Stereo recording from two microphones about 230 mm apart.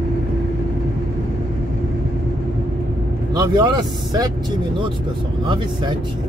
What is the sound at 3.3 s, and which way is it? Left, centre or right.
Speech, centre.